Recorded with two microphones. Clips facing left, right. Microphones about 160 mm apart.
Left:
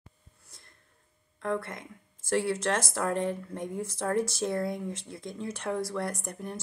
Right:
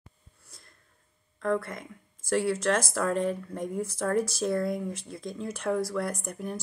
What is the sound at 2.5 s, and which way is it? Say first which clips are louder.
Speech: right 3 dB; 25° left (ahead or behind).